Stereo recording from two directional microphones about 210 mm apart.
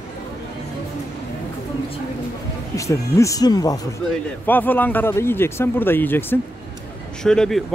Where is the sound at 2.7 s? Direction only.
15° left (ahead or behind).